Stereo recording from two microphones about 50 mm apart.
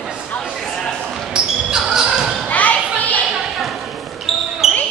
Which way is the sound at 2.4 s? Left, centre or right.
Left.